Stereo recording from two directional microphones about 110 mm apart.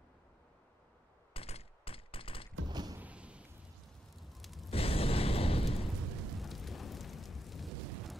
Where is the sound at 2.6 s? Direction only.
40° right (ahead or behind).